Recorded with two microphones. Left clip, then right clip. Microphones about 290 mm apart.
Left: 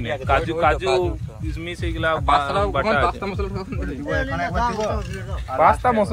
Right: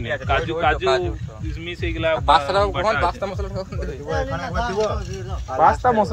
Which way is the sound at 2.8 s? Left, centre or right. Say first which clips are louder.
Even; right.